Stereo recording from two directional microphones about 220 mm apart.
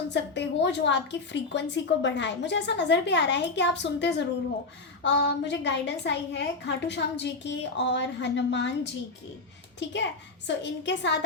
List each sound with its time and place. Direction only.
0.1 s a woman's voice: 55° left (ahead or behind)
9.9 s a woman's voice: 50° left (ahead or behind)